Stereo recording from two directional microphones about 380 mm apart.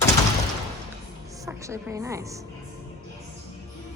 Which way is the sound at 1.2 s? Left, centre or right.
Centre.